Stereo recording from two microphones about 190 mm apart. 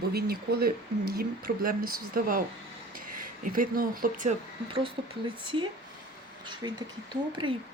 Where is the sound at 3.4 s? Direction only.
45° right (ahead or behind).